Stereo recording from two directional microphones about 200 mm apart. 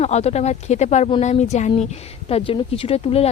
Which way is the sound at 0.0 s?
35° left (ahead or behind).